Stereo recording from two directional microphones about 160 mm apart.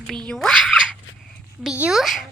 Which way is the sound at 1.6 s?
5° right (ahead or behind).